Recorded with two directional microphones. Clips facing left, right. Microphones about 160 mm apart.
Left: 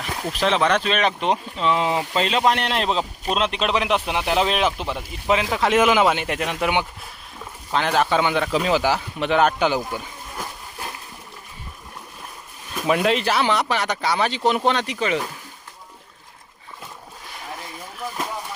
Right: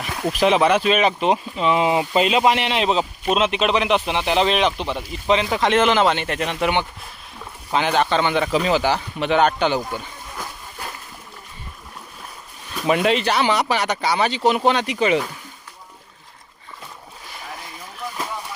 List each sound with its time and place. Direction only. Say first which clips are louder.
0.3 s a man's voice: right 3 dB; 10° right (ahead or behind); by 10.9 s 10° left (ahead or behind)
12.8 s speech: right 1 dB; centre (ahead or behind)
14.9 s speech: right 4 dB; 15° right (ahead or behind)